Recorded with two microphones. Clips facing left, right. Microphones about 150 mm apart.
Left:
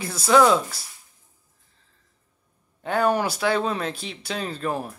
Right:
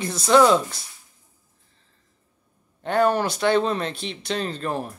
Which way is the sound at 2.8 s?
10° left (ahead or behind).